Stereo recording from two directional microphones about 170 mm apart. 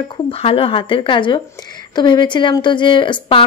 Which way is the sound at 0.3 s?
35° left (ahead or behind).